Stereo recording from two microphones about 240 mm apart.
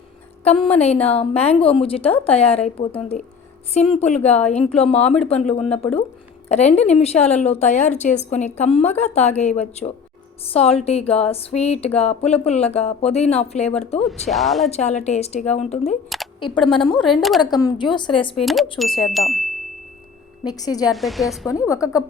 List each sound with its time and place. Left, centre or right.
0.4 s a woman's voice: left
14.0 s speech: centre
14.7 s a woman's voice: left
16.0 s a sound: centre
16.4 s a woman's voice: centre
18.4 s speech: centre
20.4 s a woman's voice: centre
20.9 s speech: centre
21.5 s a woman's voice: centre